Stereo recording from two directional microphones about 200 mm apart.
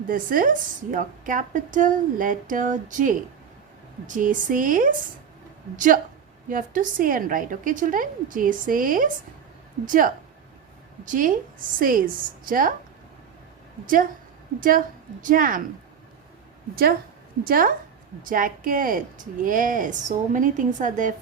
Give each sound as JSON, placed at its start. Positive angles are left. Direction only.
{"t": 0.1, "sound": "a woman's voice", "side_deg": -45}
{"t": 6.5, "sound": "a woman's voice", "side_deg": -40}
{"t": 13.8, "sound": "a woman's voice", "side_deg": -45}
{"t": 17.4, "sound": "a woman's voice", "side_deg": -45}